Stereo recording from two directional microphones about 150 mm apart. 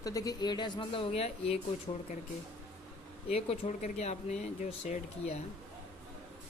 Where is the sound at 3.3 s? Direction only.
45° left (ahead or behind).